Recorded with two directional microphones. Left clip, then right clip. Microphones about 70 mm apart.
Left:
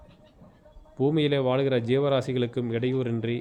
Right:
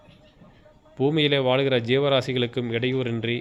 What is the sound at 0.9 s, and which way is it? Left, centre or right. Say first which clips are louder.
Speech: right 3 dB; centre.